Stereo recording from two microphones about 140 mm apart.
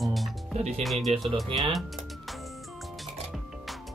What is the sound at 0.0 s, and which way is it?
Music, centre (ahead or behind).